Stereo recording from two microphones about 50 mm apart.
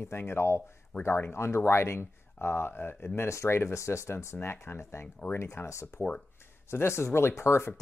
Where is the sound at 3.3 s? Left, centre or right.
Left.